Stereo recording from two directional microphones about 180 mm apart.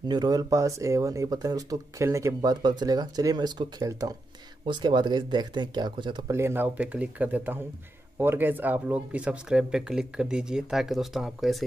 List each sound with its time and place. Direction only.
0.1 s speech: 20° right (ahead or behind); by 11.6 s centre (ahead or behind)